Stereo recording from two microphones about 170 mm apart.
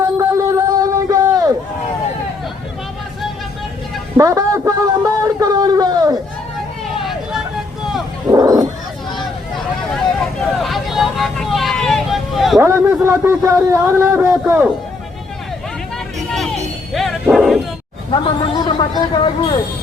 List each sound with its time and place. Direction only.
0.2 s a sound: 20° right (ahead or behind)
4.2 s a sound: 20° right (ahead or behind)
7.0 s vehicle: centre (ahead or behind)
8.3 s dog: 20° right (ahead or behind)
10.6 s vehicle: centre (ahead or behind)
12.5 s a man's voice: 15° right (ahead or behind)
16.3 s music: centre (ahead or behind)
18.1 s a woman's voice: 30° left (ahead or behind)